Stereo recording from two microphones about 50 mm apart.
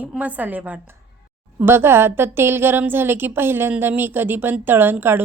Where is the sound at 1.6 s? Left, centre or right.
Right.